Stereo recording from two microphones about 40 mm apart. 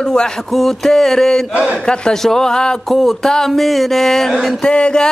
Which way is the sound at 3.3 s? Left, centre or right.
Centre.